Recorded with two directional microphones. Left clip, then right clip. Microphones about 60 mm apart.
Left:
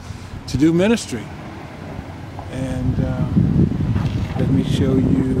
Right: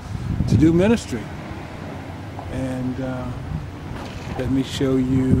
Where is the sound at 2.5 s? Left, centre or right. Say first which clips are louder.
Left 1 dB; centre.